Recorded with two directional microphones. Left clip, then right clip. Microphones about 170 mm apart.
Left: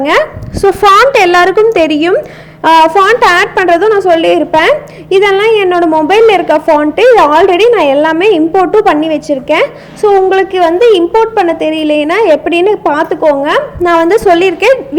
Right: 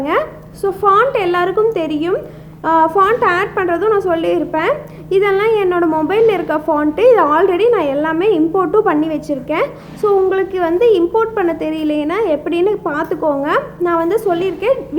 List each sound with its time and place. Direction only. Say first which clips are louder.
0.0 s a woman's voice: left 8 dB; 30° left (ahead or behind)
13.8 s a woman's voice: left 10 dB; 30° left (ahead or behind)